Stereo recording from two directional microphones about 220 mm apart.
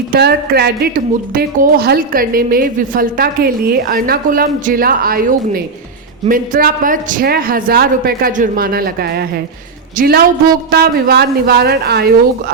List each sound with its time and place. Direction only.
0.1 s a woman's voice: 45° right (ahead or behind)